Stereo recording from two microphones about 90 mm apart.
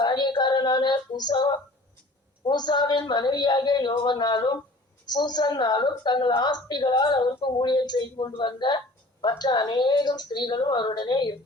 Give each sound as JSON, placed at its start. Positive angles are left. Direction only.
{"t": 0.0, "sound": "female singing", "side_deg": 55}
{"t": 2.4, "sound": "a woman's voice", "side_deg": 55}